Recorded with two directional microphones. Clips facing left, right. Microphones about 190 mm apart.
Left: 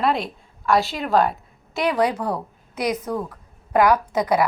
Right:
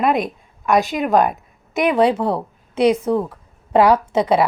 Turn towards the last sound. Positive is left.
turn(degrees=-25)  # may be behind; listen again after turning